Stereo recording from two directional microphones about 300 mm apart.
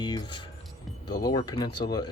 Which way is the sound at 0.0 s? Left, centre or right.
Centre.